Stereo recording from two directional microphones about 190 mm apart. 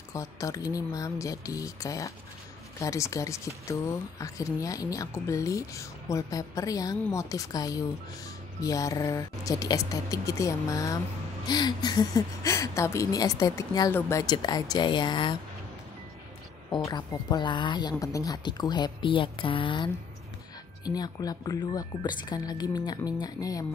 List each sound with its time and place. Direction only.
0.1 s speech: 15° left (ahead or behind)
16.7 s speech: 20° left (ahead or behind)